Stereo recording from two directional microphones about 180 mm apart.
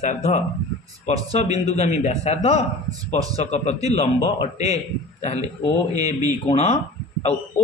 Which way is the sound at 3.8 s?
35° left (ahead or behind).